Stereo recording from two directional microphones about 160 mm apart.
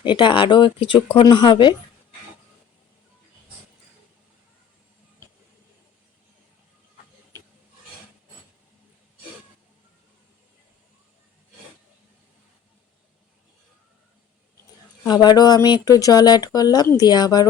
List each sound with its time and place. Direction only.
0.0 s speech: 30° left (ahead or behind)
15.0 s speech: 25° left (ahead or behind)